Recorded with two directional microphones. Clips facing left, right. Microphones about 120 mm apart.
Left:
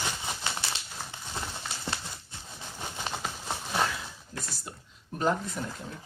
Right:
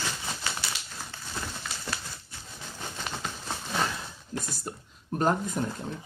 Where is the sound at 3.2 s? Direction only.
10° left (ahead or behind).